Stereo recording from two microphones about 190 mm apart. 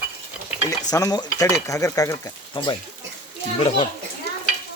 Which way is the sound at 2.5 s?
25° left (ahead or behind).